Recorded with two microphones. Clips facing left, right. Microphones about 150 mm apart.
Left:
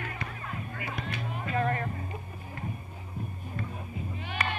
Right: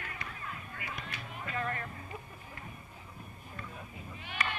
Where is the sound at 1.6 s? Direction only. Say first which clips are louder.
Left 8 dB; 35° left (ahead or behind).